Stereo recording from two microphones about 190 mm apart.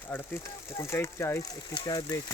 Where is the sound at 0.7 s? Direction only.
15° left (ahead or behind).